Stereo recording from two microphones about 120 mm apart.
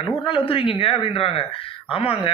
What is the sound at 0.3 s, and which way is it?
A man's voice, 50° left (ahead or behind).